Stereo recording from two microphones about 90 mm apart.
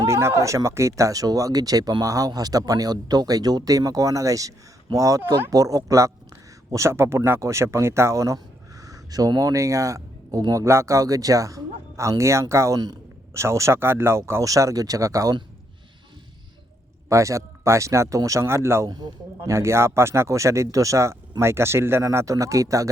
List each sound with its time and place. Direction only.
0.0 s speech: 30° right (ahead or behind)
17.1 s speech: 35° right (ahead or behind)
18.9 s speech: 45° right (ahead or behind)
19.5 s speech: 30° right (ahead or behind)